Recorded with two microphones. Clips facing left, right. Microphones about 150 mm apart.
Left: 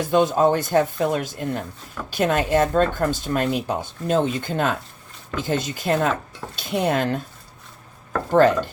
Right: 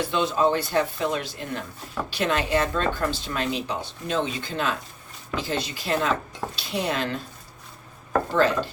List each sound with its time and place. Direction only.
0.0 s speech: 45° left (ahead or behind)
8.3 s speech: 50° left (ahead or behind)